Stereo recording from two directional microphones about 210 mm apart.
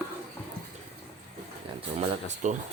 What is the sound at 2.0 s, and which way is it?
Speech, 35° right (ahead or behind).